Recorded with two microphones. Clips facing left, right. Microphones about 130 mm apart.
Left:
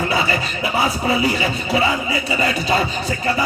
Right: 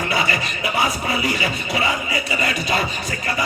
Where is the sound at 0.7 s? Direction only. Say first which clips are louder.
Left 4 dB; 30° left (ahead or behind).